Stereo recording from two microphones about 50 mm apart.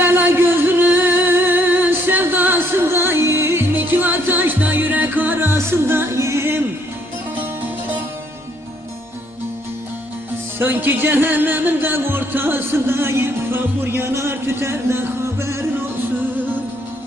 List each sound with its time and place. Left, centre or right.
0.0 s music: right
3.8 s music: right
5.5 s music: right
6.1 s music: right
10.6 s music: right